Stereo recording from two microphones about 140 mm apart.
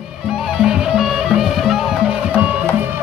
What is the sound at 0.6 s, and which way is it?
Music, 5° right (ahead or behind).